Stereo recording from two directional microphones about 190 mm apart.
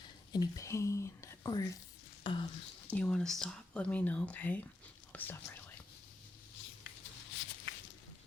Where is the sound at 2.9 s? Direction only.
5° left (ahead or behind).